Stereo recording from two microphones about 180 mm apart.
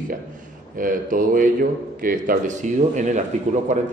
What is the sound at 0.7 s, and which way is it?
Speech, 50° right (ahead or behind).